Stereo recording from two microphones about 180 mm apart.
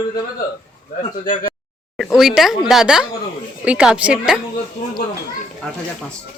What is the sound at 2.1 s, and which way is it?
Speech, centre (ahead or behind).